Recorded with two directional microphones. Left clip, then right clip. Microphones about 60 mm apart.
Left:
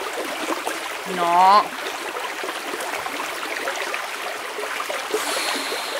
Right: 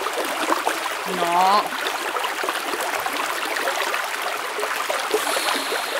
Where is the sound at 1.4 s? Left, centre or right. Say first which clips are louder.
Left 4 dB; left.